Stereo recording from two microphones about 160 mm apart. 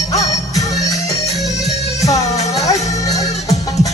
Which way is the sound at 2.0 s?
20° left (ahead or behind).